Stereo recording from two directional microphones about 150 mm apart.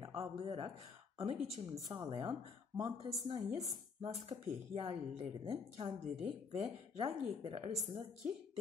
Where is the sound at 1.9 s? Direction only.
30° right (ahead or behind).